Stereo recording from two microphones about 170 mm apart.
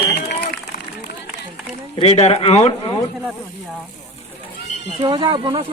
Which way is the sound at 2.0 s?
40° left (ahead or behind).